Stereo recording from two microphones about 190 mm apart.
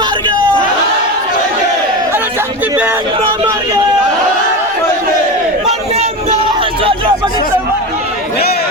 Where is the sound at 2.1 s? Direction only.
10° right (ahead or behind).